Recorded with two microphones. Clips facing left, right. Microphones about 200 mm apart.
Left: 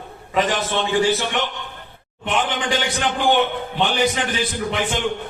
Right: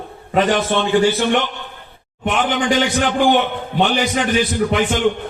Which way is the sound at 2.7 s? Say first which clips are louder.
Right 5 dB; 55° right (ahead or behind).